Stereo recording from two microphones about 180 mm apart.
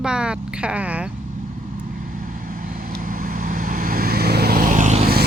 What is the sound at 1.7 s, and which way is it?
Vehicle, 50° right (ahead or behind).